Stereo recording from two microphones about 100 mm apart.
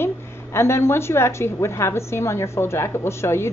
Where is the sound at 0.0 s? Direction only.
25° left (ahead or behind).